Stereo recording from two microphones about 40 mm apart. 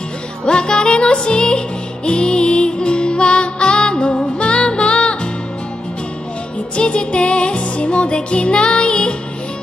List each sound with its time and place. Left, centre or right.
0.5 s music: left
6.8 s music: left